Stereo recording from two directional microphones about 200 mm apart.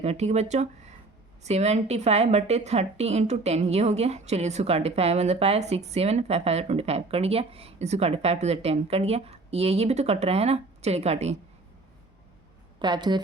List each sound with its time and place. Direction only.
0.0 s a woman's voice: 35° right (ahead or behind)
12.8 s speech: 20° right (ahead or behind)